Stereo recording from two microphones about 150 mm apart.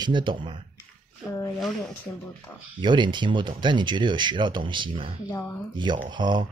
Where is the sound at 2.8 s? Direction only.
30° right (ahead or behind).